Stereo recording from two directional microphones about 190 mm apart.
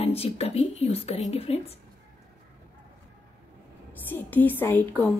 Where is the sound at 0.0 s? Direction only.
30° left (ahead or behind).